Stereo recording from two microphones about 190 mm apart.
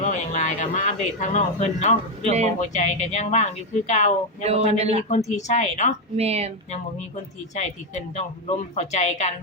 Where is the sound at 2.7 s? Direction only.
40° left (ahead or behind).